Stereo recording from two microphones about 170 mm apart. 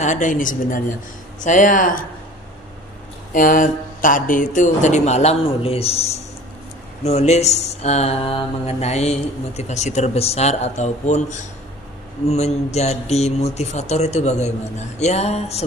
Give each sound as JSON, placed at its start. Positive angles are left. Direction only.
{"t": 0.0, "sound": "speech", "side_deg": 45}
{"t": 3.3, "sound": "speech", "side_deg": 50}
{"t": 7.0, "sound": "mantra", "side_deg": 40}